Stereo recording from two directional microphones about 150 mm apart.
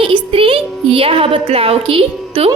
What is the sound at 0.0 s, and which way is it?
A woman's voice, 35° right (ahead or behind).